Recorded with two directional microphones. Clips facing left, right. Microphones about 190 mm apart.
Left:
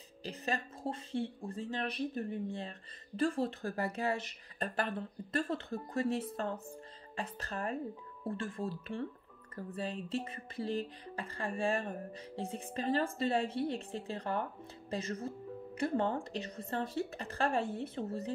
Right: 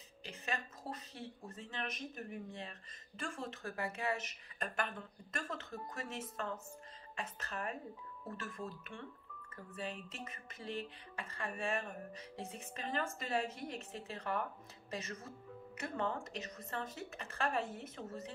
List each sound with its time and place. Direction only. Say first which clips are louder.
0.2 s speech: left 6 dB; 35° left (ahead or behind)